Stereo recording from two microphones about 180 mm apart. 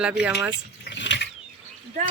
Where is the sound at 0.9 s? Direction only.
80° left.